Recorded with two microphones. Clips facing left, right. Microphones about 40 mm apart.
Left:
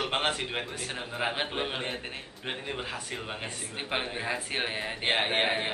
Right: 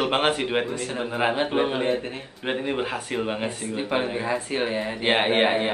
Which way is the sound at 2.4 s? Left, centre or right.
Right.